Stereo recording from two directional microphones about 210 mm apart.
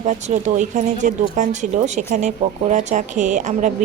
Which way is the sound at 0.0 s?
35° right (ahead or behind).